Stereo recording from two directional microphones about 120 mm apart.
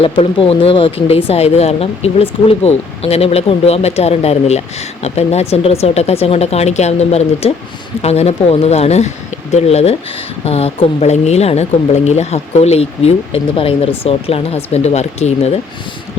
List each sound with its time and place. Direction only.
0.0 s a woman's voice: 50° left (ahead or behind); by 15.5 s 70° left (ahead or behind)